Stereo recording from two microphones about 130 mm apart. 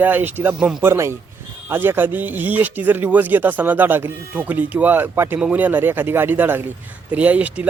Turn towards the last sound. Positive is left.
turn(degrees=-10)  # may be behind; listen again after turning